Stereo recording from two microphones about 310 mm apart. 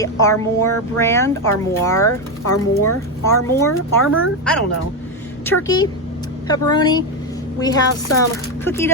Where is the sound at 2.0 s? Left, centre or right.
Left.